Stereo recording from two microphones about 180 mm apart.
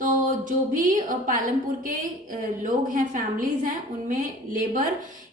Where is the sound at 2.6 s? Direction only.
45° right (ahead or behind).